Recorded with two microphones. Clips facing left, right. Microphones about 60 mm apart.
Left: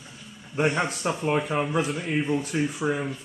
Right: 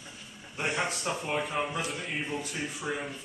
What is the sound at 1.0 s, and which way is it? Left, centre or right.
Speech, left.